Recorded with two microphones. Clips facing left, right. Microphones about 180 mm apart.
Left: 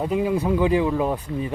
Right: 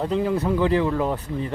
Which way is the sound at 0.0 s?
10° left (ahead or behind).